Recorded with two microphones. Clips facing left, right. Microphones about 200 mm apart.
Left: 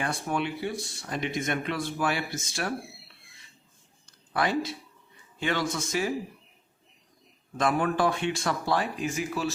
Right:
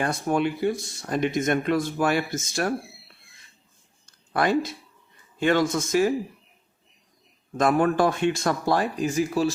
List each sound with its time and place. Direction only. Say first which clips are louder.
0.0 s speech: right 6 dB; 40° right (ahead or behind)
4.0 s a sound: right 4 dB; 45° right (ahead or behind)
5.4 s a man's voice: right 7 dB; 50° right (ahead or behind)
7.5 s speech: right 5 dB; 45° right (ahead or behind)